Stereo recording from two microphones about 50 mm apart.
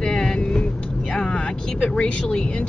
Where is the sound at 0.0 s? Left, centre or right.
Centre.